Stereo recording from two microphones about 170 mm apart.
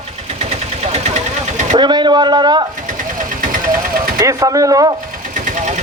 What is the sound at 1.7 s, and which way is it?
Speech, 25° right (ahead or behind).